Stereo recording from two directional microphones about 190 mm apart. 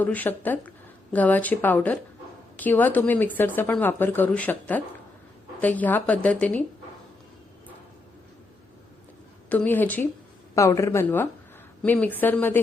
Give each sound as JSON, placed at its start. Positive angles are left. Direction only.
{"t": 0.0, "sound": "speech", "side_deg": 10}
{"t": 9.5, "sound": "speech", "side_deg": 10}